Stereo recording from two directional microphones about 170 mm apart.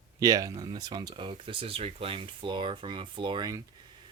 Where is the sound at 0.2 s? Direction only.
20° right (ahead or behind).